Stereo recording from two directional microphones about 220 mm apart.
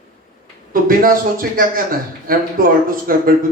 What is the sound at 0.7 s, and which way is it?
Speech, 40° right (ahead or behind).